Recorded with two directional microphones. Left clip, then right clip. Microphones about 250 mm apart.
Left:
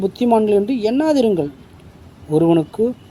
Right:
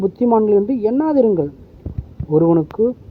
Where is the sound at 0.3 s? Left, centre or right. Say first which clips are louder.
Even; centre.